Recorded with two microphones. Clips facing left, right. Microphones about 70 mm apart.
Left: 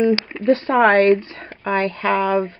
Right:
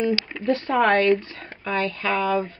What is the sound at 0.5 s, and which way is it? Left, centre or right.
Speech, left.